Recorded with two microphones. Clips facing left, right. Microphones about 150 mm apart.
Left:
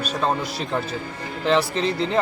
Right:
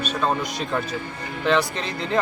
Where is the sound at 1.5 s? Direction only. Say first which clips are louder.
Left 2 dB; 30° left (ahead or behind).